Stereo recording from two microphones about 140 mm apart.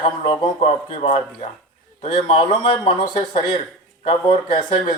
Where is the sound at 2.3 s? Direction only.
35° left (ahead or behind).